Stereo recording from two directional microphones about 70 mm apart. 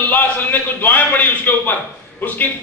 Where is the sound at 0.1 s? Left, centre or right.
Left.